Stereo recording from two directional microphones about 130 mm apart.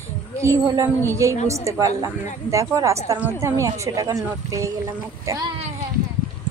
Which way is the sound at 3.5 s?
25° right (ahead or behind).